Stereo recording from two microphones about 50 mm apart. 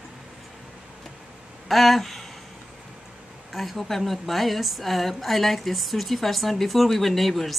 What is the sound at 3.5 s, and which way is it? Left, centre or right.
A woman's voice, centre.